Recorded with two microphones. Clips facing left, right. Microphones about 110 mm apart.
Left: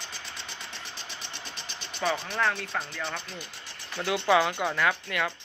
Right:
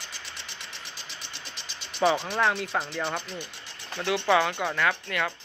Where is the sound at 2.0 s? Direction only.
15° right (ahead or behind).